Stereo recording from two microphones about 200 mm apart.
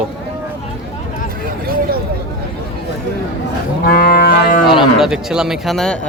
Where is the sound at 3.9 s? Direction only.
50° left (ahead or behind).